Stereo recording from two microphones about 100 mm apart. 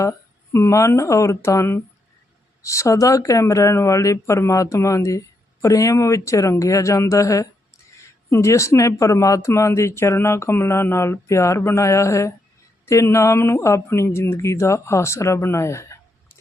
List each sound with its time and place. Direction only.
0.0 s speech: 30° left (ahead or behind)